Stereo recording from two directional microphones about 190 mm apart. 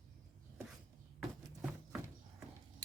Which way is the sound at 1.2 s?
Centre (ahead or behind).